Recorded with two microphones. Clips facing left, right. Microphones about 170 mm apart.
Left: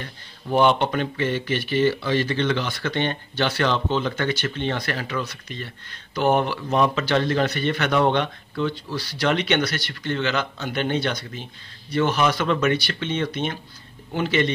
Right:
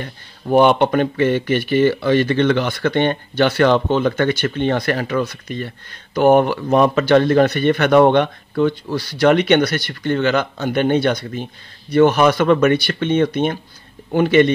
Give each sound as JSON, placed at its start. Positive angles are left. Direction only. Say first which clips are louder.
{"t": 0.0, "sound": "speech", "louder": "right 7 dB", "side_deg": -55}